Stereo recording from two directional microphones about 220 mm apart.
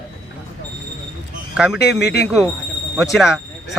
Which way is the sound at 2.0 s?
50° left (ahead or behind).